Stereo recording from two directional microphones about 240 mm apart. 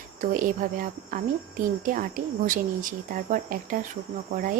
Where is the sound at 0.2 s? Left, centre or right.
Right.